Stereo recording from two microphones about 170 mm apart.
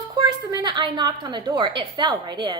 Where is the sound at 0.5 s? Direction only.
25° right (ahead or behind).